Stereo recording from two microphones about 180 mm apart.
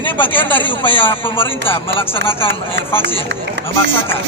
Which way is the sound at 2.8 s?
70° right (ahead or behind).